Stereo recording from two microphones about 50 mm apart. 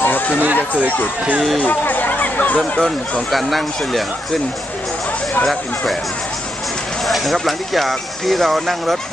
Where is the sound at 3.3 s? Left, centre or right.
Centre.